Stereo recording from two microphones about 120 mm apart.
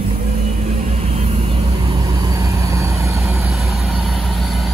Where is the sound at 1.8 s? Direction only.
30° right (ahead or behind).